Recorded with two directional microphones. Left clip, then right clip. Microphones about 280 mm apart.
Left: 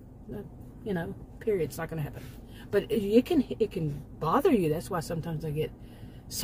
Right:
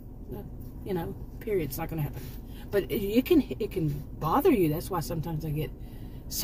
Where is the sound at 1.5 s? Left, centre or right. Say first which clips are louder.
Even; left.